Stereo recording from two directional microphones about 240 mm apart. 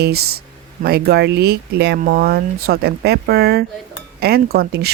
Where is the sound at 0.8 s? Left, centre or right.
Right.